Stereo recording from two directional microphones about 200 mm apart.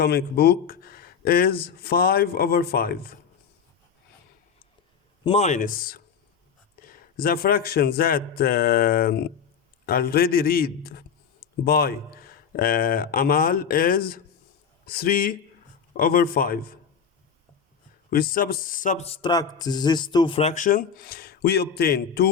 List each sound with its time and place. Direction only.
0.0 s speech: 55° left (ahead or behind)
5.2 s speech: 30° left (ahead or behind); by 16.7 s 45° left (ahead or behind)
18.1 s speech: 45° left (ahead or behind)